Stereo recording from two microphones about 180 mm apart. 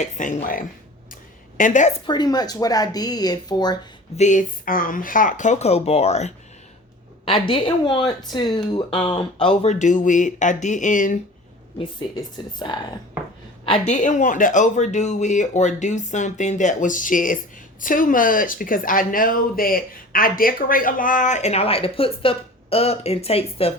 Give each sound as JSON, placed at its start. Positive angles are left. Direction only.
{"t": 0.0, "sound": "speech", "side_deg": 45}
{"t": 2.0, "sound": "speech", "side_deg": 25}
{"t": 4.2, "sound": "speech", "side_deg": 45}
{"t": 11.8, "sound": "speech", "side_deg": 25}
{"t": 13.7, "sound": "speech", "side_deg": 35}